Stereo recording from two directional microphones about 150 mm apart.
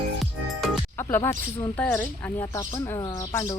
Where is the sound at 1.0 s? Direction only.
20° left (ahead or behind).